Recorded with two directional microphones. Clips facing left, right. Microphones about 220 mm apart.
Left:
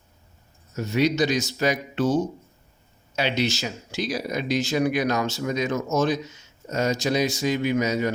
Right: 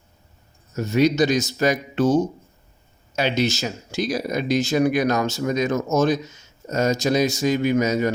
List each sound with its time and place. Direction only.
0.8 s speech: 45° right (ahead or behind)